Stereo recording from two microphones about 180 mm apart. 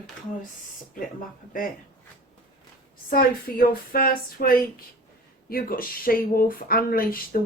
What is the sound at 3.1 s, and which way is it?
Speech, 55° left (ahead or behind).